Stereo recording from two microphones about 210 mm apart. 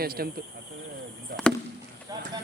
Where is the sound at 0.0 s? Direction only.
45° right (ahead or behind).